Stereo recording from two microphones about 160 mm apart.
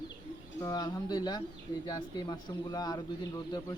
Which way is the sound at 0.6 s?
25° left (ahead or behind).